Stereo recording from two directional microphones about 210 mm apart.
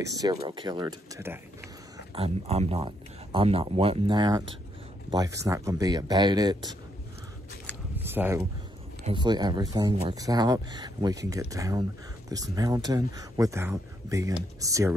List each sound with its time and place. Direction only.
0.1 s speech: 15° right (ahead or behind)
2.1 s speech: 30° right (ahead or behind)
8.0 s speech: 10° right (ahead or behind)
9.0 s speech: 20° right (ahead or behind)